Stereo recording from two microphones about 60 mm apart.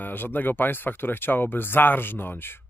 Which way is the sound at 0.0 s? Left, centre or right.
Left.